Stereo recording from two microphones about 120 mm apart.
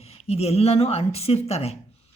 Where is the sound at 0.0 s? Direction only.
60° left (ahead or behind).